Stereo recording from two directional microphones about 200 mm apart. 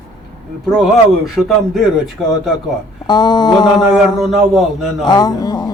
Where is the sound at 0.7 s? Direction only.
Centre (ahead or behind).